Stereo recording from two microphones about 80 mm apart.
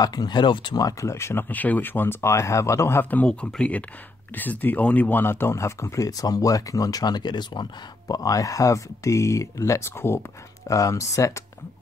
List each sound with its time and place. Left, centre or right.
0.0 s speech: left
0.8 s speech: left
1.5 s speech: left
3.3 s speech: centre; by 7.6 s left
8.1 s speech: left
10.7 s speech: left